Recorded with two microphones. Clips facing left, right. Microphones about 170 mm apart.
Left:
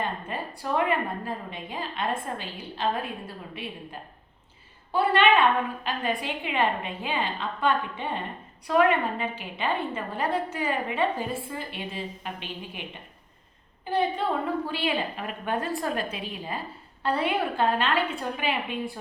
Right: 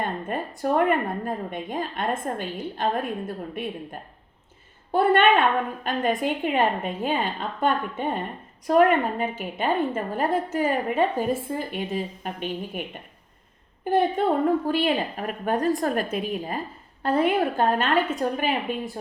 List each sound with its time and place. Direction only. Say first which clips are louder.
0.0 s a woman's voice: right 3 dB; 50° right (ahead or behind)
4.9 s a woman's voice: right 3 dB; 50° right (ahead or behind)
13.8 s a woman's voice: right 5 dB; 50° right (ahead or behind)